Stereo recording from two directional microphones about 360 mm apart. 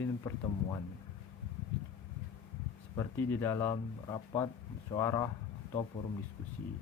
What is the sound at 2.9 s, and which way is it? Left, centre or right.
A man's voice, centre.